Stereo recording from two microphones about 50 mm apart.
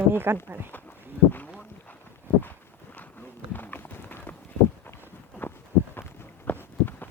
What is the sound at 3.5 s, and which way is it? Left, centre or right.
Run, left.